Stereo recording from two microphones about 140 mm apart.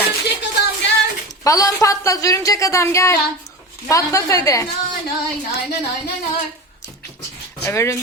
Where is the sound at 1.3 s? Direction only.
25° left (ahead or behind).